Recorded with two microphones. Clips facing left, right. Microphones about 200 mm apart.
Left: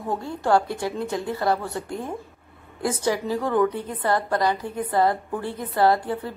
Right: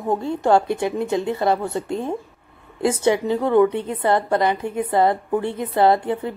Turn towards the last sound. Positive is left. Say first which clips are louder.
# right 3 dB
turn(degrees=-20)  # may be behind; listen again after turning